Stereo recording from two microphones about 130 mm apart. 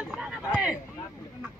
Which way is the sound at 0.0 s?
5° right (ahead or behind).